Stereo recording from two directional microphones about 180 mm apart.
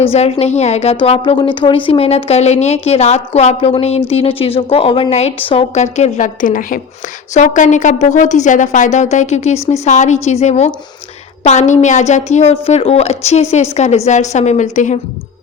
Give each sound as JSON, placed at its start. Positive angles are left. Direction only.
{"t": 0.0, "sound": "a woman's voice", "side_deg": 35}